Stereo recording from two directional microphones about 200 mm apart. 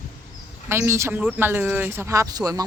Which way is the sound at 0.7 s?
15° right (ahead or behind).